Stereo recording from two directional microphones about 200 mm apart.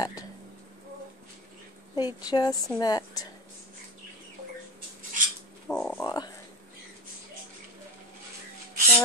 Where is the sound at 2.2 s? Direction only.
20° left (ahead or behind).